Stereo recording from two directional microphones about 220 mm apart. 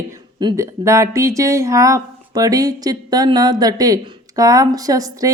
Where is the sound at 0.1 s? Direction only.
15° right (ahead or behind).